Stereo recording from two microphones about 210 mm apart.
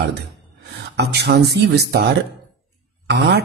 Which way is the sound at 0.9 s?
50° right (ahead or behind).